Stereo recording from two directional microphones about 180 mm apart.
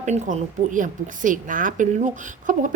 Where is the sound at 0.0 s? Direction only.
40° right (ahead or behind).